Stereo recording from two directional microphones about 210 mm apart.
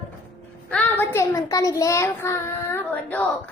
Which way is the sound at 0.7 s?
10° left (ahead or behind).